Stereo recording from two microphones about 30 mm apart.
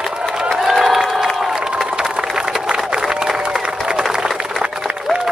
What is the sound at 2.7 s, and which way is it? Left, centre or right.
Crowd, right.